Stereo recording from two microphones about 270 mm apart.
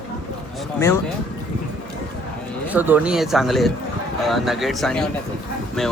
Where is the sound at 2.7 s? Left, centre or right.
Centre.